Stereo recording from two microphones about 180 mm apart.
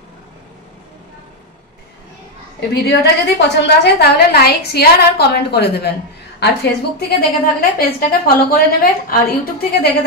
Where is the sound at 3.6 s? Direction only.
70° left (ahead or behind).